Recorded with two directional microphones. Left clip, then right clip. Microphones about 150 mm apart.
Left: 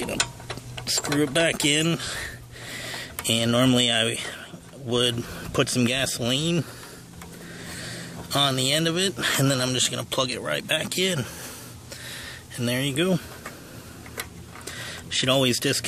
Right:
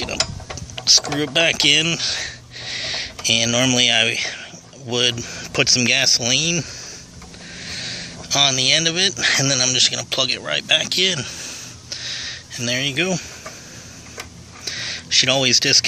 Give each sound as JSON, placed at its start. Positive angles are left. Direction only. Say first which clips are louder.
{"t": 0.7, "sound": "speech", "louder": "right 8 dB", "side_deg": 20}
{"t": 7.6, "sound": "vehicle", "louder": "right 9 dB", "side_deg": 25}
{"t": 9.2, "sound": "speech", "louder": "right 6 dB", "side_deg": 30}
{"t": 14.6, "sound": "a sound", "louder": "right 9 dB", "side_deg": 25}